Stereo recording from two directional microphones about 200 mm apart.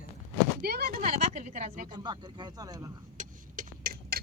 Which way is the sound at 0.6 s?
50° right (ahead or behind).